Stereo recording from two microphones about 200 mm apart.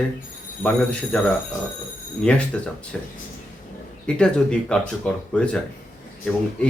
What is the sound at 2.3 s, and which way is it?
Speech, 5° left (ahead or behind).